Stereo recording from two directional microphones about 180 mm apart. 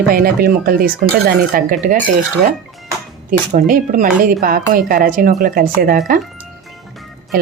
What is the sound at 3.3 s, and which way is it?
Speech, 50° right (ahead or behind).